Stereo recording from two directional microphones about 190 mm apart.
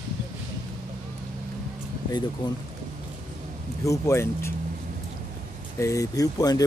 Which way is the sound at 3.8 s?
15° left (ahead or behind).